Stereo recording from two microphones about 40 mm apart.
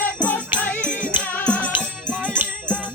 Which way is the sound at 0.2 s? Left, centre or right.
Left.